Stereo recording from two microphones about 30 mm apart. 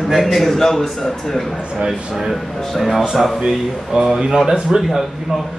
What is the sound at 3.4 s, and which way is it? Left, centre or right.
Speech, right.